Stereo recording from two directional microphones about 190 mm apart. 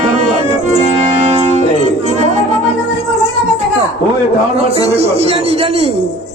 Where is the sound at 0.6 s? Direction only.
35° right (ahead or behind).